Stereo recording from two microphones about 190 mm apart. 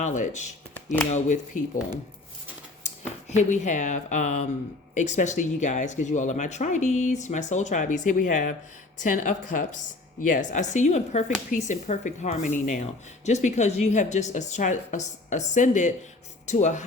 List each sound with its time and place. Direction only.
0.0 s speech: 40° left (ahead or behind)
3.3 s speech: 40° left (ahead or behind)